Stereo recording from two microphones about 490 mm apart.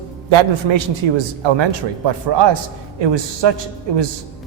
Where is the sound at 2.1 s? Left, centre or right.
Right.